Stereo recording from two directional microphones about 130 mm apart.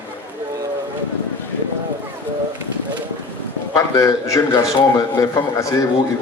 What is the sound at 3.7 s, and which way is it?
A man's voice, 25° left (ahead or behind).